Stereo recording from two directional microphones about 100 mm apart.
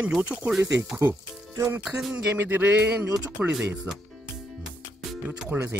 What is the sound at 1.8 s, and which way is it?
Speech, 5° right (ahead or behind).